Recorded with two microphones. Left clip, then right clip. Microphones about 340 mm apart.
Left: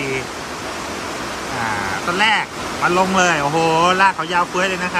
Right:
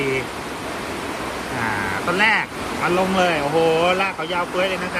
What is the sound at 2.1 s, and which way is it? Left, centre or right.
Speech, centre.